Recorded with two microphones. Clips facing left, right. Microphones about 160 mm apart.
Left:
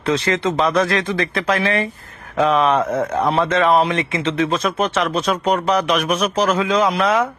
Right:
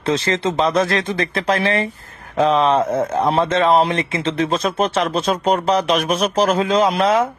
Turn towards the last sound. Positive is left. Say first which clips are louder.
# right 1 dB
turn(degrees=-30)  # may be behind; listen again after turning